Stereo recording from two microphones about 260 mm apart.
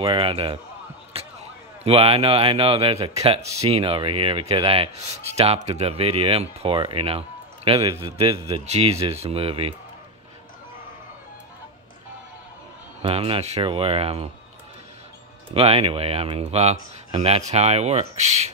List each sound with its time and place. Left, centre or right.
0.0 s speech: right
13.0 s speech: right
15.5 s speech: right